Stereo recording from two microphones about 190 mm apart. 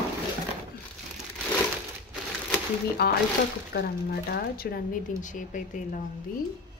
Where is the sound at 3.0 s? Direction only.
60° left (ahead or behind); by 6.0 s 40° left (ahead or behind).